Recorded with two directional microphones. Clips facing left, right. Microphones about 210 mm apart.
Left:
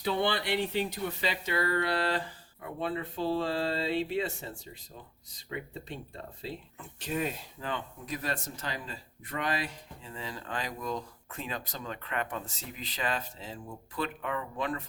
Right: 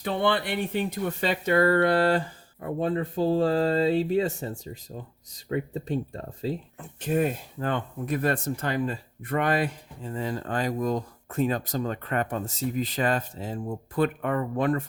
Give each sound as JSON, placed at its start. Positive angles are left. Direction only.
{"t": 0.0, "sound": "speech", "side_deg": -50}